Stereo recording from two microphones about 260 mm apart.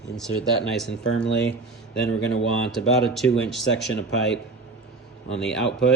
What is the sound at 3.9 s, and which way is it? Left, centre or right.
Speech, left.